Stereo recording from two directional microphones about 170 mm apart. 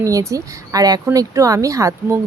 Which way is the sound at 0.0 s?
20° right (ahead or behind).